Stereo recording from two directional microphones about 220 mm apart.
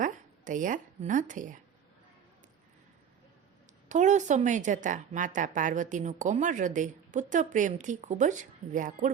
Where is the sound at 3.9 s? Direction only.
35° right (ahead or behind).